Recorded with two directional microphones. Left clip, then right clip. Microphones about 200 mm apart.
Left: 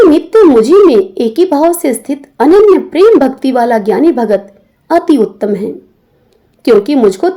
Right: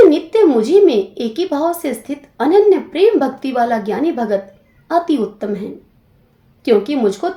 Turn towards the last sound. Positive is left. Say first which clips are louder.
# left 8 dB
turn(degrees=40)  # may be behind; listen again after turning